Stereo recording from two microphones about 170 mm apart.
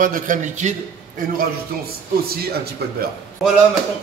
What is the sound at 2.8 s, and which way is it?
Speech, 70° right (ahead or behind).